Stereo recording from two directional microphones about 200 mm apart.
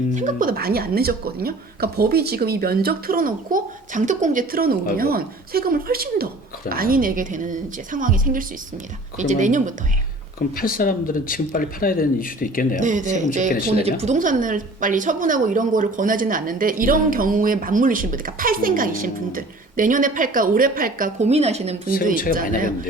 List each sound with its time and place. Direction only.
0.1 s a woman's voice: 40° right (ahead or behind)
10.5 s speech: 45° left (ahead or behind)
12.8 s speech: 40° right (ahead or behind)
13.5 s speech: 45° left (ahead or behind)
14.0 s a woman's voice: 40° right (ahead or behind)